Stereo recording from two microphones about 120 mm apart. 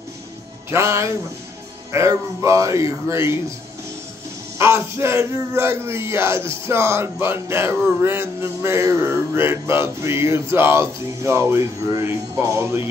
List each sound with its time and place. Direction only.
0.7 s speech: 25° right (ahead or behind)
4.6 s speech: 20° right (ahead or behind)